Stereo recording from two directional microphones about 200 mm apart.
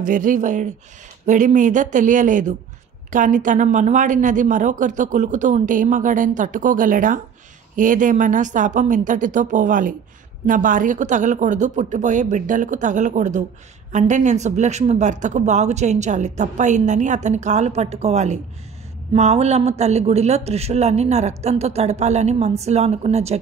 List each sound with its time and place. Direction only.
0.0 s speech: 40° right (ahead or behind)